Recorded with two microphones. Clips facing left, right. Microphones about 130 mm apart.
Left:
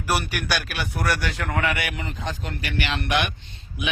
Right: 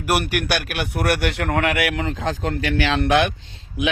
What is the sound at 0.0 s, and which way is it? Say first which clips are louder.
A man's voice: right 4 dB; 60° right (ahead or behind).